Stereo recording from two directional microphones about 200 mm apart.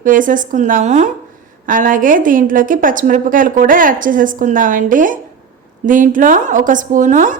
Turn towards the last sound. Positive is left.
turn(degrees=-40)  # may be behind; listen again after turning